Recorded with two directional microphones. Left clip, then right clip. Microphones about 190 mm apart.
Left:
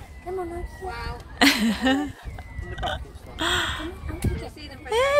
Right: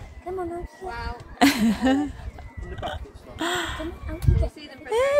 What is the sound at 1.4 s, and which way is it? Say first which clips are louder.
Speech: left 1 dB; 35° right (ahead or behind).